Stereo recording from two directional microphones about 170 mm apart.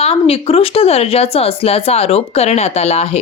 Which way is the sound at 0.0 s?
35° left (ahead or behind).